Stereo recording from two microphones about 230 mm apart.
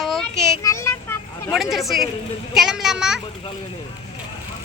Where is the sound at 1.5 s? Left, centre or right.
Centre.